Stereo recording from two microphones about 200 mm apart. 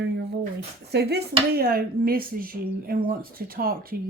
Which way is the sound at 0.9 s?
55° right (ahead or behind).